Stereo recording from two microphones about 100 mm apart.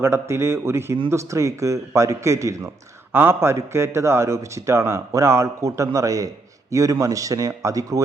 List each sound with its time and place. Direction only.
0.0 s a man's voice: 25° right (ahead or behind)